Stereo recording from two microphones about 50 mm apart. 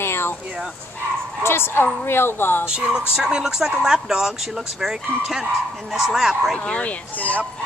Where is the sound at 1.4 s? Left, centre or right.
Left.